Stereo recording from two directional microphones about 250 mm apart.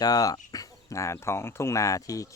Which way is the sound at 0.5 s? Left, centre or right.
Centre.